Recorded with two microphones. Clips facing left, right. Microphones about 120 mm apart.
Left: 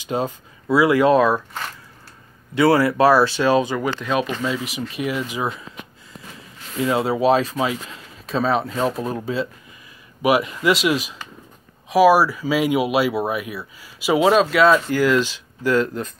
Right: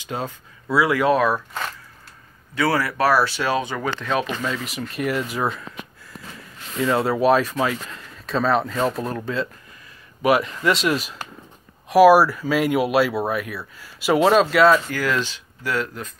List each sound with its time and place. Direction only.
0.0 s speech: 20° left (ahead or behind)
2.5 s speech: 25° left (ahead or behind); by 5.7 s 5° left (ahead or behind)
6.9 s speech: centre (ahead or behind)
14.9 s speech: 15° left (ahead or behind)